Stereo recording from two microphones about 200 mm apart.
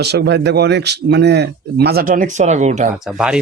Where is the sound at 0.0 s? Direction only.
60° right (ahead or behind); by 2.8 s 35° right (ahead or behind).